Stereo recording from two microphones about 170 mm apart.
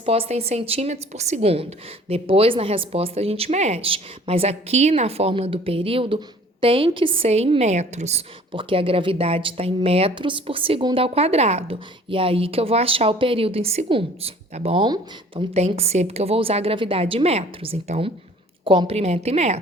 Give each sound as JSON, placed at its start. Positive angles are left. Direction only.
{"t": 0.0, "sound": "a woman's voice", "side_deg": -35}